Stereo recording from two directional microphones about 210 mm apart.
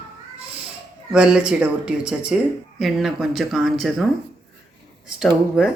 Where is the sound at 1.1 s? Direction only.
5° right (ahead or behind).